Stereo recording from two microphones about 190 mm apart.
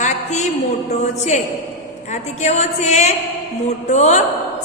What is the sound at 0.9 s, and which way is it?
A man's voice, 35° left (ahead or behind).